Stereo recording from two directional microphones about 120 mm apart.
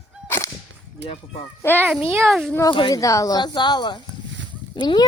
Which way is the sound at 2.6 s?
40° left (ahead or behind).